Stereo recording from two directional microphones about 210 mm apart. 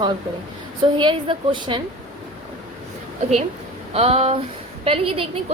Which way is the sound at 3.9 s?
30° right (ahead or behind).